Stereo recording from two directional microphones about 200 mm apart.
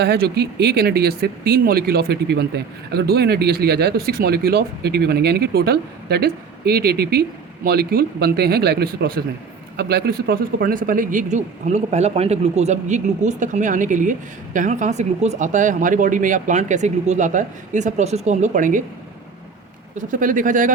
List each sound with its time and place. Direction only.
0.0 s speech: 55° right (ahead or behind)
20.0 s speech: 40° right (ahead or behind)